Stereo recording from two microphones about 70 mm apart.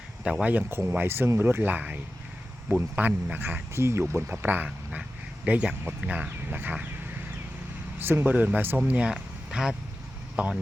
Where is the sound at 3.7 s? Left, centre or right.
Right.